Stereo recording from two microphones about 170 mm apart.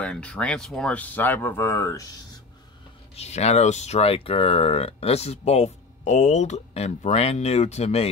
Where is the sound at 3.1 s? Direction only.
40° left (ahead or behind).